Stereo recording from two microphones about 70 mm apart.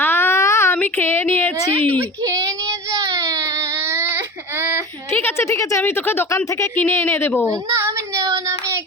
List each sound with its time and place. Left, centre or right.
0.0 s a sound: left
0.8 s a woman's voice: left
2.2 s child singing: right
5.4 s speech: left
5.8 s speech: left
7.4 s a woman's voice: right
8.1 s child singing: right